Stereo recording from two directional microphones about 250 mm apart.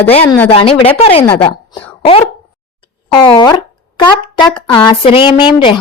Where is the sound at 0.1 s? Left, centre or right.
Left.